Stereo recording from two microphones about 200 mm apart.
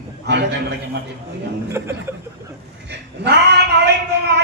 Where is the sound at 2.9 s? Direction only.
55° right (ahead or behind).